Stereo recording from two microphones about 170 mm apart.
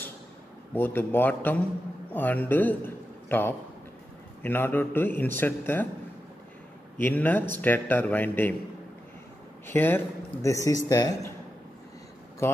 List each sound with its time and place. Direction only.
0.7 s a man's voice: 10° left (ahead or behind)
7.0 s a man's voice: 10° left (ahead or behind)
9.7 s a man's voice: 10° left (ahead or behind)